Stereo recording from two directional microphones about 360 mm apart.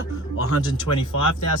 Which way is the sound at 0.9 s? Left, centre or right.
Left.